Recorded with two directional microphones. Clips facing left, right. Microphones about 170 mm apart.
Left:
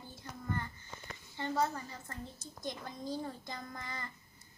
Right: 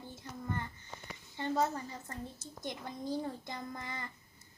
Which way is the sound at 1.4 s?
20° right (ahead or behind).